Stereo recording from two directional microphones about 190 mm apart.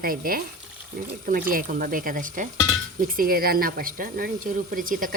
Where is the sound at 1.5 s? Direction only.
45° right (ahead or behind).